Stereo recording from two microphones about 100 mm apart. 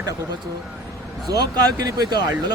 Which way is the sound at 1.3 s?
40° right (ahead or behind).